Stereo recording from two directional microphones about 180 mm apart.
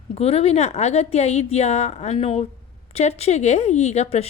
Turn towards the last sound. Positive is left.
turn(degrees=35)  # may be behind; listen again after turning